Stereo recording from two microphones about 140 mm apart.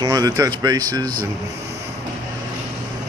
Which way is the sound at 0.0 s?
25° right (ahead or behind).